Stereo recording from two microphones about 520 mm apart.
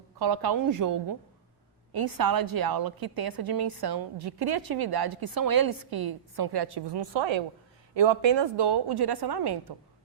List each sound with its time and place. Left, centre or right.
0.2 s a woman's voice: right